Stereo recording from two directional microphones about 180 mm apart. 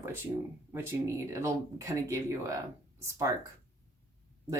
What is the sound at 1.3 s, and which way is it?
Speech, 15° right (ahead or behind).